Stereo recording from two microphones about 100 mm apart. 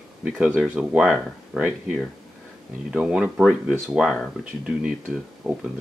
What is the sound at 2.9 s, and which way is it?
Speech, 10° right (ahead or behind).